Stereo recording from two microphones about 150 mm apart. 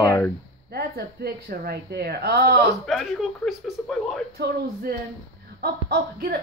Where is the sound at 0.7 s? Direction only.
90° right.